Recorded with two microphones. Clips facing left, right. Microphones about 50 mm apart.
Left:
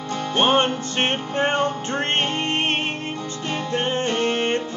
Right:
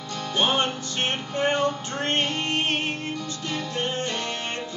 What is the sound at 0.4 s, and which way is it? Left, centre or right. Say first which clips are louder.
Music: left 5 dB; left.